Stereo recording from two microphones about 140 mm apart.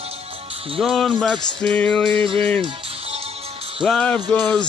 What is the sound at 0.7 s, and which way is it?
Music, centre (ahead or behind).